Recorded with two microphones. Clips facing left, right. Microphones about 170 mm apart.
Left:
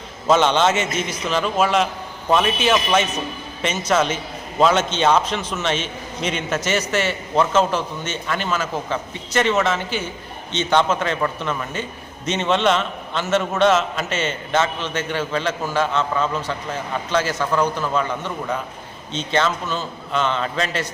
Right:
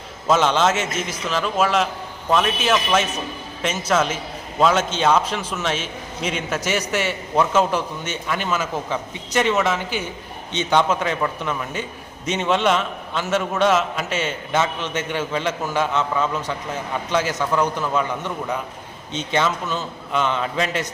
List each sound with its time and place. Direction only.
0.3 s a man's voice: 5° right (ahead or behind)